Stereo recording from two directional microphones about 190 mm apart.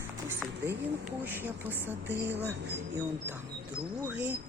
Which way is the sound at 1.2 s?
10° right (ahead or behind).